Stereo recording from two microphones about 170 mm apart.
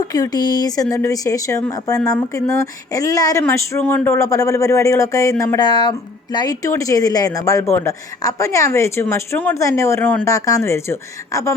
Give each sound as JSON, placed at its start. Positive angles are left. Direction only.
{"t": 0.1, "sound": "speech", "side_deg": 25}